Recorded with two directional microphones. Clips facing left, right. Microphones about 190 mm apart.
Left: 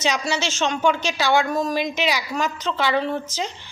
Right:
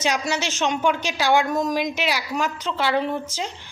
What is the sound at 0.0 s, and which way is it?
A woman's voice, 10° right (ahead or behind).